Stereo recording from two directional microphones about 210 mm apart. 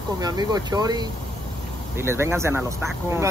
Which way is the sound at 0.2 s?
20° right (ahead or behind).